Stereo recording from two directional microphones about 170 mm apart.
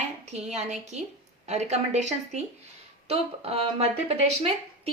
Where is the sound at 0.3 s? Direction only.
40° right (ahead or behind).